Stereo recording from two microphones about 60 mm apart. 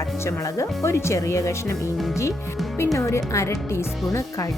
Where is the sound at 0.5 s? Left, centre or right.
Left.